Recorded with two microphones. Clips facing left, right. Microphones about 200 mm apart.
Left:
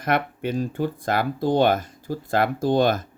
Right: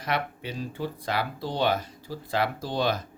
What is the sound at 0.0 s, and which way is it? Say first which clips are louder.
Speech: left 6 dB; 50° left (ahead or behind).